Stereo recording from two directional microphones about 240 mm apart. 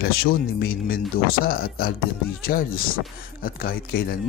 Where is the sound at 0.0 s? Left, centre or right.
Left.